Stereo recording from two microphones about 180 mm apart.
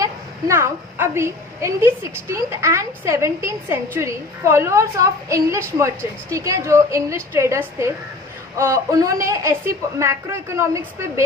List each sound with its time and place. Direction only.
0.0 s a woman's voice: 15° right (ahead or behind)